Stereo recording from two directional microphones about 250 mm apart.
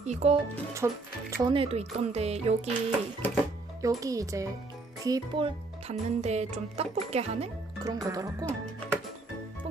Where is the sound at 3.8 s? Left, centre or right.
Centre.